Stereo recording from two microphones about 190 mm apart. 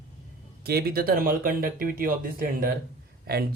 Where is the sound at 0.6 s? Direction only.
55° right (ahead or behind).